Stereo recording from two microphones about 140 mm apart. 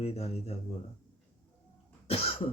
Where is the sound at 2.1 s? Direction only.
45° left (ahead or behind).